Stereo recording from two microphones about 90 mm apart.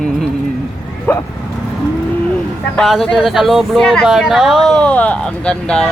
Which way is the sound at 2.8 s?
Centre (ahead or behind).